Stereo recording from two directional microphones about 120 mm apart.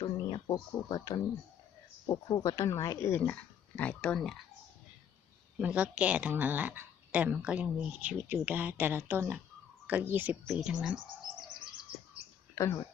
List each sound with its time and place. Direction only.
0.0 s speech: 35° left (ahead or behind)
3.1 s speech: 15° left (ahead or behind)
5.5 s speech: 10° right (ahead or behind)
10.4 s speech: centre (ahead or behind)
12.5 s speech: 30° left (ahead or behind)